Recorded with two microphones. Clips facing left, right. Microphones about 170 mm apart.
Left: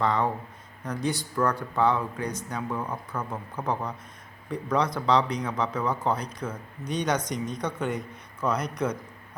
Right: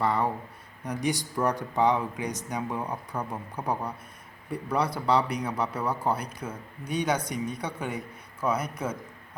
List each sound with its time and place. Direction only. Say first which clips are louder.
0.0 s speech: left 1 dB; 5° right (ahead or behind)